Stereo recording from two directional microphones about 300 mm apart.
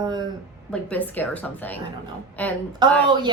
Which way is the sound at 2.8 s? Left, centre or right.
Centre.